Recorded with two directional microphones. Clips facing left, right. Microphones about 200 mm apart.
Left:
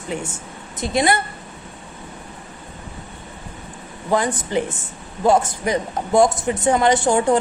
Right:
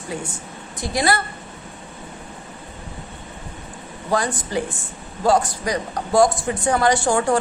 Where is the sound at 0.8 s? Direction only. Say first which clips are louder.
Left 2 dB; 20° left (ahead or behind).